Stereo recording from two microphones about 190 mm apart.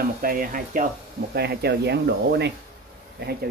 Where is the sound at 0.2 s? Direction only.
50° right (ahead or behind).